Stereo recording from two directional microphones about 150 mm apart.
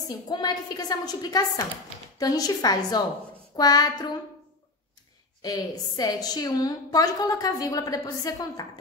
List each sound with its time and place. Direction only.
0.3 s a woman's voice: 25° left (ahead or behind)
5.4 s a woman's voice: 25° left (ahead or behind)